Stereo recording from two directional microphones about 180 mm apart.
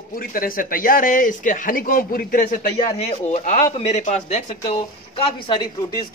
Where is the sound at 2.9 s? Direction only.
40° left (ahead or behind).